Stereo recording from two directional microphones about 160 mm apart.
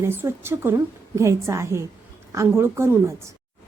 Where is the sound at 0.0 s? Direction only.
15° right (ahead or behind).